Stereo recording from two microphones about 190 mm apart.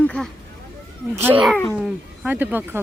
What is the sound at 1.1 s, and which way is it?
A woman's voice, 10° right (ahead or behind).